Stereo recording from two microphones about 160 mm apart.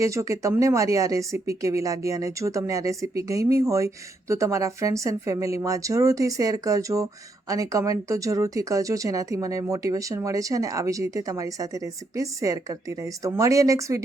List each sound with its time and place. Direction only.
0.0 s speech: 20° right (ahead or behind)